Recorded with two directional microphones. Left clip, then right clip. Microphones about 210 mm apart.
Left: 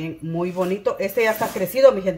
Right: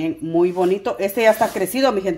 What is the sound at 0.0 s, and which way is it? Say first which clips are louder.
Speech: right 8 dB; 50° right (ahead or behind).